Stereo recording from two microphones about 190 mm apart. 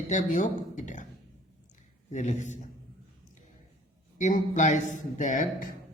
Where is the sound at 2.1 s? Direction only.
40° left (ahead or behind).